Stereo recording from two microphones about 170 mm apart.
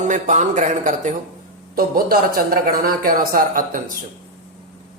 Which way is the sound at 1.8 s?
60° right (ahead or behind).